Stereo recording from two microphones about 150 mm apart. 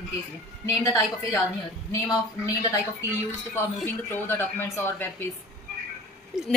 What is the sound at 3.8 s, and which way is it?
Speech, 15° left (ahead or behind).